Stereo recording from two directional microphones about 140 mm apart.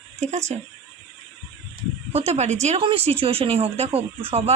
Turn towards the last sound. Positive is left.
turn(degrees=-45)  # may be behind; listen again after turning